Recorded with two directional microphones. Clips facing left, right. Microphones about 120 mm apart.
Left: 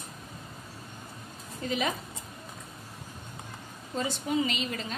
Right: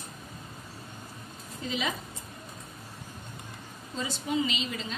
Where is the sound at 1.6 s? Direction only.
50° left (ahead or behind).